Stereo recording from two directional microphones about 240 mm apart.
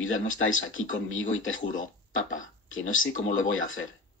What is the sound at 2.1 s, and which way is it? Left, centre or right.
Speech, left.